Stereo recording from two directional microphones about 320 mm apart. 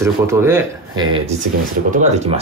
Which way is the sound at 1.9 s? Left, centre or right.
Right.